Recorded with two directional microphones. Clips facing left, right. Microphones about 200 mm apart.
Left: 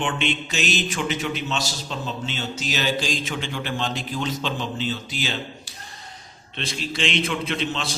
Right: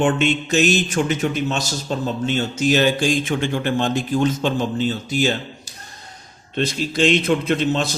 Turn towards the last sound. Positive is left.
turn(degrees=-45)  # may be behind; listen again after turning